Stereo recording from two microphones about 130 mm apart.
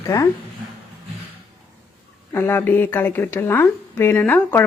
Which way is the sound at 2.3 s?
20° left (ahead or behind).